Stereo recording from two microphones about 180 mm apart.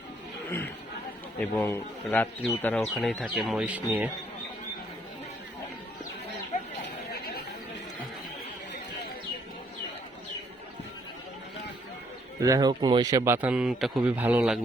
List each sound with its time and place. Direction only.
1.4 s a man's voice: 10° left (ahead or behind); by 4.1 s 10° right (ahead or behind)
7.1 s chatter: 60° left (ahead or behind)
12.4 s a man's voice: 20° right (ahead or behind)